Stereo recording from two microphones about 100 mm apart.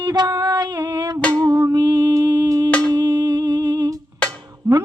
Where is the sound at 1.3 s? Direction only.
35° right (ahead or behind).